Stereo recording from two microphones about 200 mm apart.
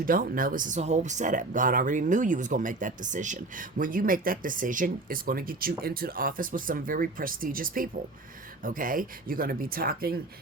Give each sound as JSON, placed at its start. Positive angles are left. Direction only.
{"t": 0.0, "sound": "speech", "side_deg": -45}